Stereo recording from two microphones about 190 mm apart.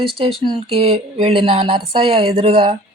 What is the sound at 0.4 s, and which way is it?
Speech, 30° right (ahead or behind).